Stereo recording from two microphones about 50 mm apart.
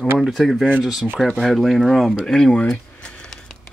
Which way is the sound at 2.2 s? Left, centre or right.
Centre.